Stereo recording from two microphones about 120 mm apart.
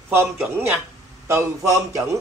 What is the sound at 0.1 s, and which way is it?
Speech, 20° right (ahead or behind).